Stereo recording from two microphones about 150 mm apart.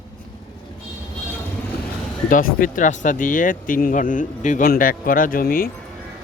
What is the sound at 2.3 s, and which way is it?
Speech, 65° left (ahead or behind).